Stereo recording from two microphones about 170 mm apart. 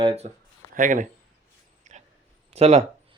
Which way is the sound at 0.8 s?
50° right (ahead or behind).